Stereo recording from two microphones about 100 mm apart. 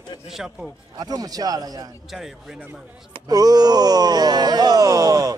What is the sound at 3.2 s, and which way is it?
A man's voice, 40° right (ahead or behind).